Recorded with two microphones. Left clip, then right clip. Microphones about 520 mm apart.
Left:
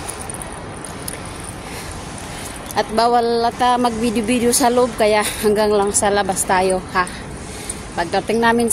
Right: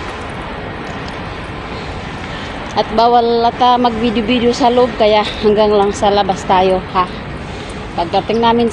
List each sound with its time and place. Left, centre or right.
2.7 s a woman's voice: left